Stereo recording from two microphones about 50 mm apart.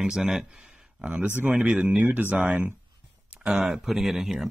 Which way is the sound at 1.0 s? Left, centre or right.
Right.